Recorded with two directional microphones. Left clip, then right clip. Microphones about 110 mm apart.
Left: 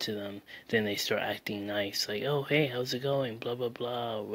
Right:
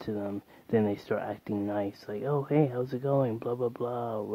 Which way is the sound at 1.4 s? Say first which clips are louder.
Right 3 dB; 25° right (ahead or behind).